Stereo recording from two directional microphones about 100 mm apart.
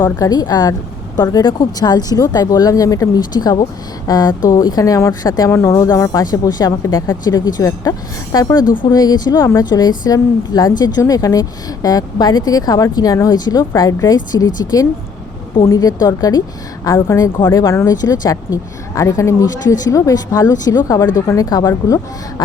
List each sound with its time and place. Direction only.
0.3 s speech: 40° left (ahead or behind)
5.5 s speech: 25° left (ahead or behind)
9.4 s speech: 30° left (ahead or behind)
9.6 s speech: 40° left (ahead or behind)